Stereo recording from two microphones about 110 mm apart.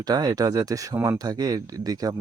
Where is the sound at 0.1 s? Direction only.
35° right (ahead or behind).